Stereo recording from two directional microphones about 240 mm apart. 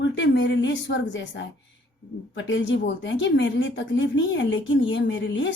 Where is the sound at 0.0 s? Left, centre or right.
Left.